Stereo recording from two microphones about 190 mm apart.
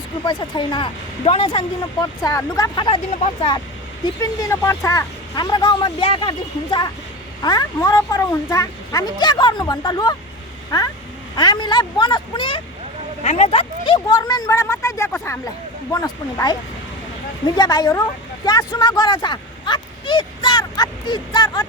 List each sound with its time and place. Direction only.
0.3 s speech: 25° left (ahead or behind)
4.0 s speech: 15° left (ahead or behind)
11.3 s speech: 25° left (ahead or behind)